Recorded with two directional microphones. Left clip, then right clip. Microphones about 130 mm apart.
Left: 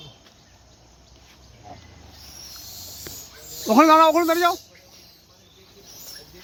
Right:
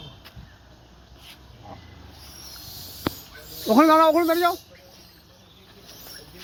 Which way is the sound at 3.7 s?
30° left (ahead or behind).